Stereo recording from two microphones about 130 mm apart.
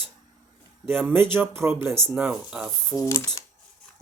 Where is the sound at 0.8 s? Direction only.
15° right (ahead or behind).